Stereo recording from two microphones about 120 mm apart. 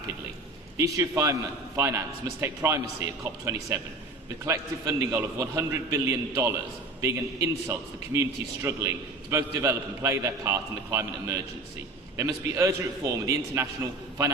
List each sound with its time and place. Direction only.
0.8 s a man's voice: 30° right (ahead or behind)